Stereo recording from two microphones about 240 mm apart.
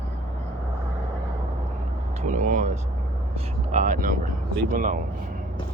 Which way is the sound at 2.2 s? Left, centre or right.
Right.